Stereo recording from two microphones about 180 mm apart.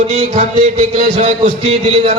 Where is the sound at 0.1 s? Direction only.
40° right (ahead or behind).